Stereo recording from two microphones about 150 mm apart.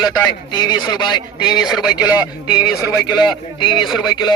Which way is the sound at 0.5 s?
30° left (ahead or behind).